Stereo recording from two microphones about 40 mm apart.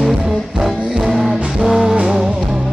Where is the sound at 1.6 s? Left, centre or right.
Centre.